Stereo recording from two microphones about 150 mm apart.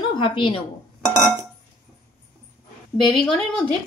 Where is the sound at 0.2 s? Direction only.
35° left (ahead or behind).